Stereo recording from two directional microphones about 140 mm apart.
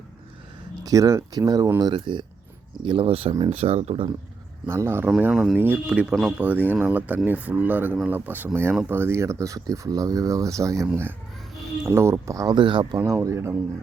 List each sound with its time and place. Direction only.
0.9 s speech: 25° right (ahead or behind); by 4.1 s 45° right (ahead or behind)
4.6 s speech: 20° right (ahead or behind)
13.0 s speech: 20° right (ahead or behind)